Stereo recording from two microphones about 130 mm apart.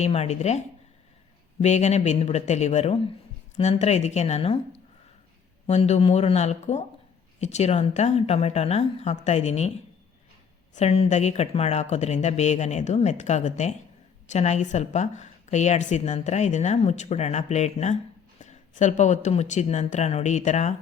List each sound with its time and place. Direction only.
0.0 s a woman's voice: 55° left (ahead or behind)
1.6 s a woman's voice: 60° left (ahead or behind)
5.6 s a woman's voice: 55° left (ahead or behind)
10.8 s a woman's voice: 55° left (ahead or behind)
18.3 s a sound: 70° left (ahead or behind)
19.3 s a woman's voice: 60° left (ahead or behind)